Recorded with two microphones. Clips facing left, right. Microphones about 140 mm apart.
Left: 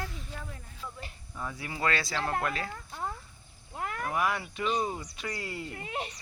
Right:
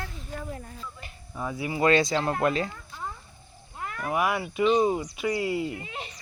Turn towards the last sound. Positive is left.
turn(degrees=55)  # may be behind; listen again after turning